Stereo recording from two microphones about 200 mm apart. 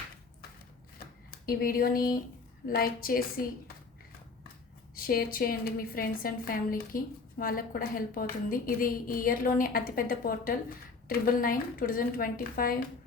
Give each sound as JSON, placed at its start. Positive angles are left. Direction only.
{"t": 0.9, "sound": "typewriter", "side_deg": 45}
{"t": 2.6, "sound": "a woman's voice", "side_deg": 45}
{"t": 4.9, "sound": "a woman's voice", "side_deg": 45}